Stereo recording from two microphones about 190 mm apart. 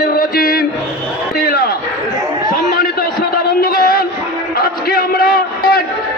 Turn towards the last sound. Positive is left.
turn(degrees=55)  # may be behind; listen again after turning